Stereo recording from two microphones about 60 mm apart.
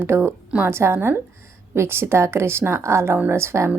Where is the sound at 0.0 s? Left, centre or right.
Right.